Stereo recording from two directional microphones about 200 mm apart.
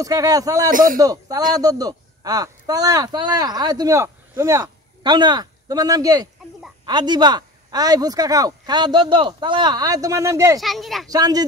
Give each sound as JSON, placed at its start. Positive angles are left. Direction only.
{"t": 0.0, "sound": "speech", "side_deg": -20}
{"t": 0.7, "sound": "a man's voice", "side_deg": -40}
{"t": 0.9, "sound": "a man's voice", "side_deg": -20}
{"t": 10.6, "sound": "speech", "side_deg": 0}
{"t": 11.1, "sound": "speech", "side_deg": -20}